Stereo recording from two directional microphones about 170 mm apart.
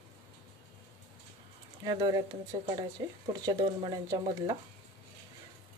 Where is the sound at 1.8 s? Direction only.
20° right (ahead or behind).